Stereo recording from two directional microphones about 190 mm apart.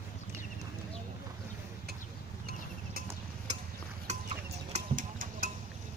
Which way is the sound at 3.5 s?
35° right (ahead or behind).